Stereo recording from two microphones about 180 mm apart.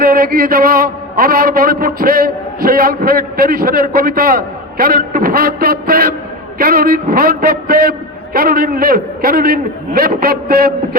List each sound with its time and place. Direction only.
0.0 s a man's voice: 55° right (ahead or behind)